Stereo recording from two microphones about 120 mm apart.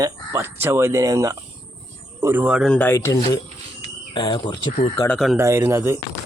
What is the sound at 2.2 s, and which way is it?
Speech, 15° right (ahead or behind).